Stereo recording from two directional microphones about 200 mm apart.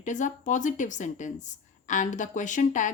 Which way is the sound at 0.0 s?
40° left (ahead or behind).